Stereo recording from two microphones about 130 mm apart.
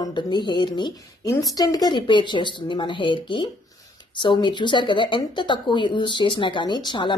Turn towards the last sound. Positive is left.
turn(degrees=35)  # may be behind; listen again after turning